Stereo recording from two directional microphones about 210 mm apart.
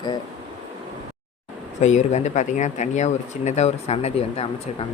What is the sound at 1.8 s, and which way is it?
Speech, 35° left (ahead or behind).